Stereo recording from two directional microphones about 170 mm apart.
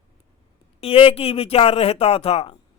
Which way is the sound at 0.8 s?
35° left (ahead or behind).